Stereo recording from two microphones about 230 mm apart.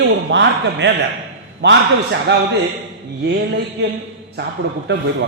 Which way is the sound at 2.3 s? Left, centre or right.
Right.